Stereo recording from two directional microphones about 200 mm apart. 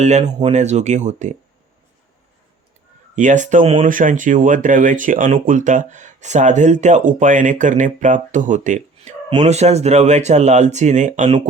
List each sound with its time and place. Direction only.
0.0 s speech: 35° right (ahead or behind)
3.2 s speech: 40° right (ahead or behind)